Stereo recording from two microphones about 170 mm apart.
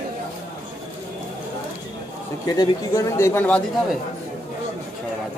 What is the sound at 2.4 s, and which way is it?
Speech, 25° left (ahead or behind).